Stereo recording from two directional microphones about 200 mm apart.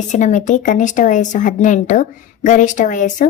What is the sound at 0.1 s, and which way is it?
A woman's voice, 35° left (ahead or behind).